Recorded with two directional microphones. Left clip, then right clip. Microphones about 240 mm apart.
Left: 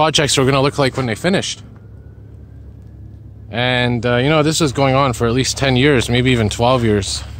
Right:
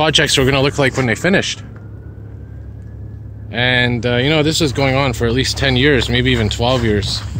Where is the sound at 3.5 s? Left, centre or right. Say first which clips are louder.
Right 2 dB; left.